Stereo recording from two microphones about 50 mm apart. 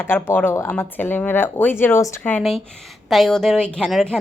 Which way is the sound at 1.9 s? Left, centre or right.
Left.